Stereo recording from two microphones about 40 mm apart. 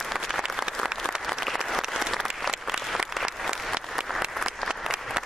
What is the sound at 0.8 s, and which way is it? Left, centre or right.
Applause, centre.